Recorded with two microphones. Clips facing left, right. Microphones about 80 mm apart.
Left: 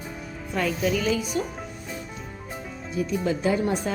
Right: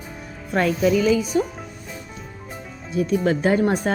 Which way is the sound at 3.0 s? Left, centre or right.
Right.